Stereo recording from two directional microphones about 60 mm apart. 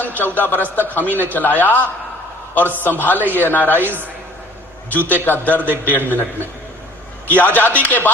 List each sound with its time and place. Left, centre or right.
0.0 s a man's voice: left
3.8 s a man's voice: right
4.9 s a man's voice: left
7.3 s a man's voice: left